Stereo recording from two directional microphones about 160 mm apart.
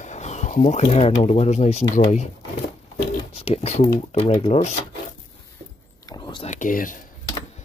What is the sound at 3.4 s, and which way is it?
Speech, 40° left (ahead or behind).